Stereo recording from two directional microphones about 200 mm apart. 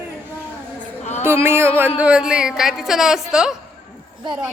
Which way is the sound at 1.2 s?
10° right (ahead or behind).